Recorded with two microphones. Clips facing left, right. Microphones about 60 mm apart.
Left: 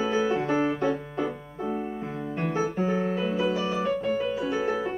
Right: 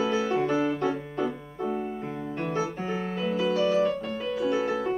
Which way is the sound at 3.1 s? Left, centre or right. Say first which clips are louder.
Even; centre.